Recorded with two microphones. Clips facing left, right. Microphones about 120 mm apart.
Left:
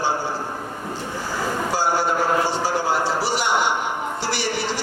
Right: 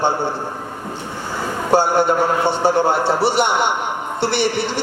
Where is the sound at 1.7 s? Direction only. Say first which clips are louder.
Right 8 dB; 60° right (ahead or behind).